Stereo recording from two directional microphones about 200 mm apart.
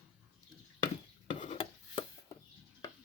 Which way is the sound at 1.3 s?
25° left (ahead or behind).